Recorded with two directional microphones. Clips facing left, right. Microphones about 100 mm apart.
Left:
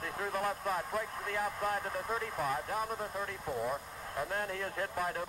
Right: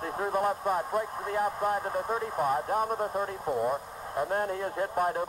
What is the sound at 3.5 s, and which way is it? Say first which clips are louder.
Speech: right 7 dB; 45° right (ahead or behind).